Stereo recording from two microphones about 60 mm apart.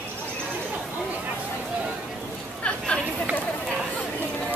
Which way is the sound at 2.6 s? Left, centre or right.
Centre.